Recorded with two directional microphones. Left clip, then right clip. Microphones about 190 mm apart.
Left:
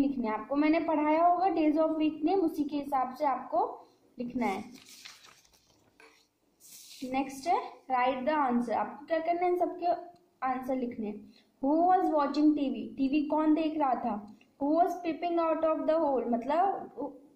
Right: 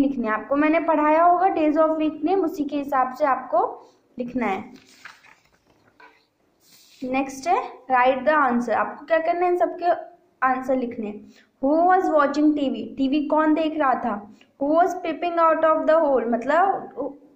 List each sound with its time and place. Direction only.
0.0 s a woman's voice: 20° right (ahead or behind)
7.0 s a woman's voice: 20° right (ahead or behind)